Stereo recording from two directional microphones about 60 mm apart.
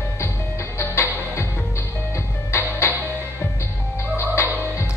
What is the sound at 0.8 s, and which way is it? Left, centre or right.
Music, left.